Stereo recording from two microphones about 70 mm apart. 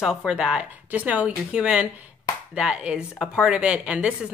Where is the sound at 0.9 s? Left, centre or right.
Right.